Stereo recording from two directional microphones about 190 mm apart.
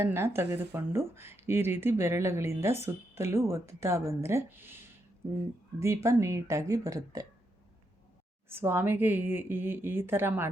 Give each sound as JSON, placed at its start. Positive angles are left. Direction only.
{"t": 0.0, "sound": "speech", "side_deg": -15}
{"t": 5.8, "sound": "speech", "side_deg": -15}
{"t": 8.4, "sound": "speech", "side_deg": -10}